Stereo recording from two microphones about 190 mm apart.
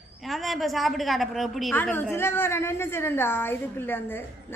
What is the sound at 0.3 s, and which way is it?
A woman's voice, centre (ahead or behind).